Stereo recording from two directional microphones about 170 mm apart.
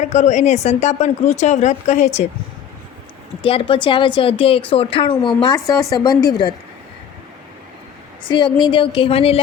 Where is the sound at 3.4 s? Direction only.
35° left (ahead or behind).